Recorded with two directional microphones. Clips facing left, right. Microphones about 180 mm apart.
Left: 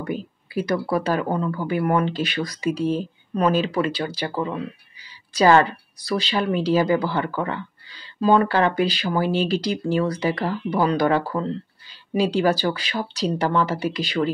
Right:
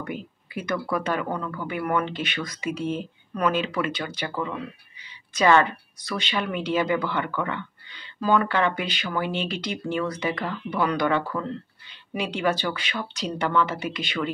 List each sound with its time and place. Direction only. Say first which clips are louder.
0.0 s speech: left 5 dB; 35° left (ahead or behind)